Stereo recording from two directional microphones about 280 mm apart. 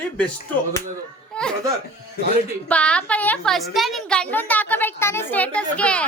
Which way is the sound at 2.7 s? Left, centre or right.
Centre.